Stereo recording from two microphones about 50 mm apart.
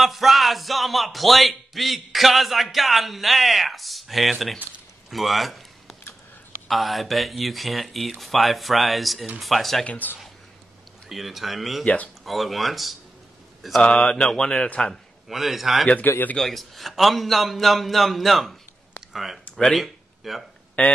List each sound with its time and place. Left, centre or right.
0.0 s speech: centre
5.1 s a sound: centre
6.7 s speech: centre
9.8 s speech: left
11.1 s speech: centre
11.8 s speech: left
12.3 s speech: centre
13.6 s mantra: centre
13.8 s speech: centre
15.2 s speech: centre
20.8 s speech: left